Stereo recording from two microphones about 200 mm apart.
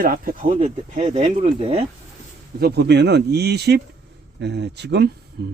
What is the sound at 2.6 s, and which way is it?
Speech, 55° right (ahead or behind).